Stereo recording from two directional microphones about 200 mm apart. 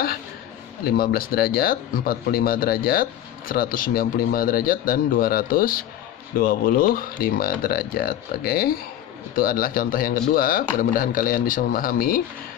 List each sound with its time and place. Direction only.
0.9 s speech: 45° left (ahead or behind)